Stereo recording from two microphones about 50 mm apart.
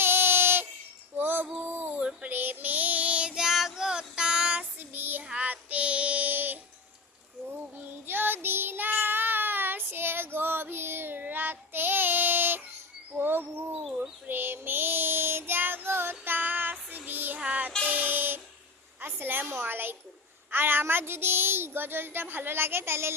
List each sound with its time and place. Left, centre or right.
0.0 s a sound: right
2.3 s child singing: right
3.3 s child singing: centre
4.8 s child singing: right
5.2 s child singing: right
5.5 s child singing: right
7.8 s child singing: right
13.1 s bird: right
14.3 s child singing: right
17.3 s child singing: right
17.8 s a sound: right
20.5 s child singing: right